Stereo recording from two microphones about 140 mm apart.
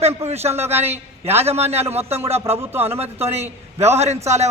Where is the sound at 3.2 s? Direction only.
50° right (ahead or behind).